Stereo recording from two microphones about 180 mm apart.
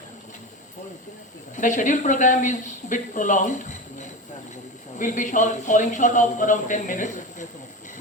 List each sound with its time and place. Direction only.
1.5 s speech: 45° left (ahead or behind)